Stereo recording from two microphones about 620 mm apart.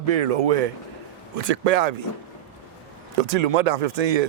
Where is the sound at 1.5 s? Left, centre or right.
Right.